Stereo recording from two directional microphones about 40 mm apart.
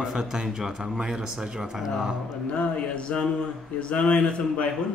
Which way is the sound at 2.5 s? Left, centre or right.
Left.